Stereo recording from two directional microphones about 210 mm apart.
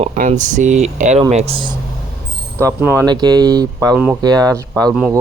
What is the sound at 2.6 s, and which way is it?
A man's voice, 10° right (ahead or behind).